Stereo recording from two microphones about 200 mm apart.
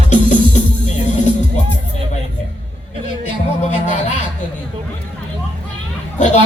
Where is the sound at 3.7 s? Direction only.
35° left (ahead or behind).